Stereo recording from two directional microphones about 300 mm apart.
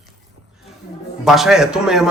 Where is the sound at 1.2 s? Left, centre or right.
Centre.